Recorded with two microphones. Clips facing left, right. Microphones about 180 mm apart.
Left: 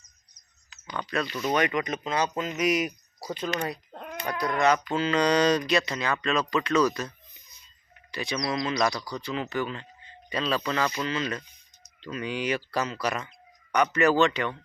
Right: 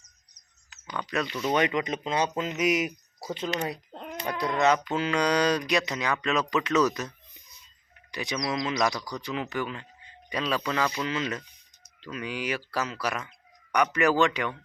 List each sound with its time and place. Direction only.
0.9 s speech: 15° right (ahead or behind)
2.6 s speech: 15° right (ahead or behind)
8.1 s speech: 15° right (ahead or behind)